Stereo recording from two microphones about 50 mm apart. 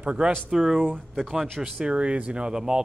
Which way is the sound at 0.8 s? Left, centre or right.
Centre.